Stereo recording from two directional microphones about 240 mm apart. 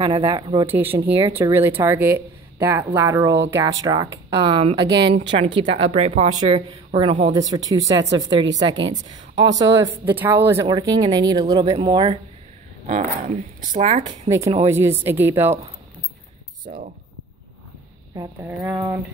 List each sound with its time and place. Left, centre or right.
0.0 s a woman's voice: centre
0.7 s a woman's voice: centre
8.1 s speech: right
10.0 s a woman's voice: centre
12.8 s a woman's voice: right
14.3 s a woman's voice: centre
18.1 s a woman's voice: centre